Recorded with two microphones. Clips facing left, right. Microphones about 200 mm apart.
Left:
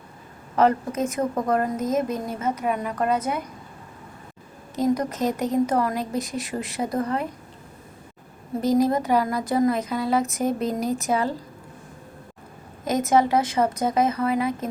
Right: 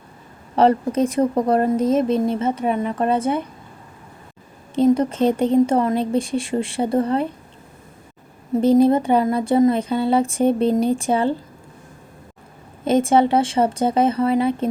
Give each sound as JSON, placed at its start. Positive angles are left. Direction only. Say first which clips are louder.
{"t": 0.5, "sound": "speech", "louder": "right 4 dB", "side_deg": -30}
{"t": 4.7, "sound": "speech", "louder": "right 6 dB", "side_deg": -30}
{"t": 8.6, "sound": "speech", "louder": "right 6 dB", "side_deg": -25}
{"t": 12.8, "sound": "speech", "louder": "right 4 dB", "side_deg": -30}